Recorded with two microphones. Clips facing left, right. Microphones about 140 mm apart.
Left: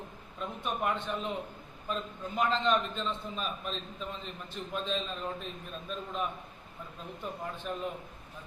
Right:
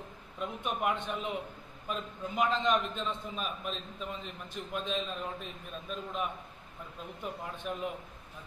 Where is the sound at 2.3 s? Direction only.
10° right (ahead or behind).